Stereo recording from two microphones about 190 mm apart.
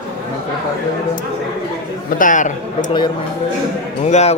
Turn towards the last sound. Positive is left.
turn(degrees=35)  # may be behind; listen again after turning